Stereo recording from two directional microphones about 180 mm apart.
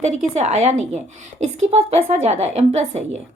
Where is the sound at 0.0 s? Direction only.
40° right (ahead or behind).